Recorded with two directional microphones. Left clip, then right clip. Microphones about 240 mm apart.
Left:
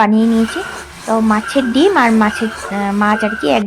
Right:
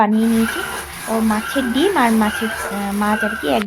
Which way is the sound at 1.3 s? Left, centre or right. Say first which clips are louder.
Left 5 dB; centre.